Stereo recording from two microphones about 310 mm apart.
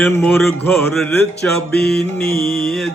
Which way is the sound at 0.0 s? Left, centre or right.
Centre.